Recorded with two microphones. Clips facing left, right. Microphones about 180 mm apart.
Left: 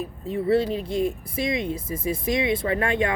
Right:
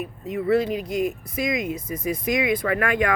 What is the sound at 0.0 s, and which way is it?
Speech, 30° left (ahead or behind).